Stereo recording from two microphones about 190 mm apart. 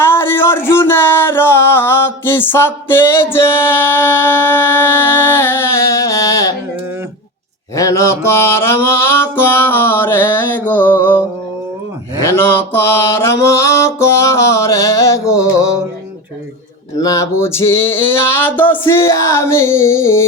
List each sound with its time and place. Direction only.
0.0 s a sound: 10° left (ahead or behind)
7.8 s mantra: 15° left (ahead or behind)
12.2 s mantra: 10° left (ahead or behind)
17.0 s mantra: 20° left (ahead or behind)